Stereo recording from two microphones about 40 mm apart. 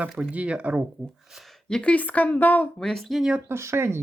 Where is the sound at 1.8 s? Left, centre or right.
Left.